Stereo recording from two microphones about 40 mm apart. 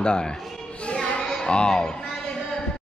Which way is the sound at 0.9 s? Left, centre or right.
Left.